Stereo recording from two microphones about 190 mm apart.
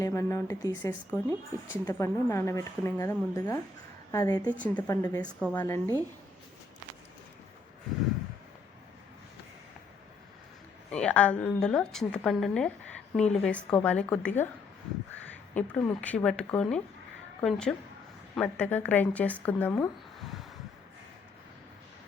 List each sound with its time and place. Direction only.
0.0 s a woman's voice: 15° left (ahead or behind)
4.5 s a woman's voice: 5° left (ahead or behind)
4.9 s a woman's voice: 20° left (ahead or behind)
5.2 s a woman's voice: 5° left (ahead or behind)
10.9 s a woman's voice: 5° left (ahead or behind)
15.5 s a woman's voice: 5° left (ahead or behind)